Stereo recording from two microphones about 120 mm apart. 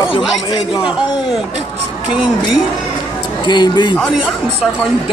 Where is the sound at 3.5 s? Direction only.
40° left (ahead or behind).